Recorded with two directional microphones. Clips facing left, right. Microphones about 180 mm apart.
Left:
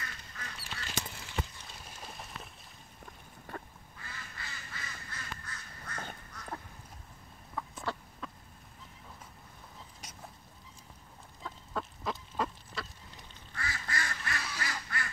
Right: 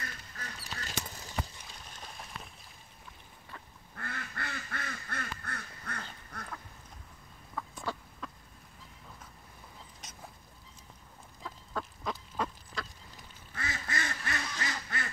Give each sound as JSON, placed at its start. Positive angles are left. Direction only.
{"t": 0.4, "sound": "a sound", "side_deg": -40}
{"t": 1.7, "sound": "a sound", "side_deg": 5}
{"t": 3.5, "sound": "quack", "side_deg": 50}
{"t": 3.9, "sound": "quack", "side_deg": -60}
{"t": 6.3, "sound": "duck", "side_deg": -55}
{"t": 7.5, "sound": "chicken", "side_deg": 0}
{"t": 10.0, "sound": "dog", "side_deg": 10}
{"t": 11.4, "sound": "duck", "side_deg": 0}
{"t": 13.6, "sound": "duck", "side_deg": -20}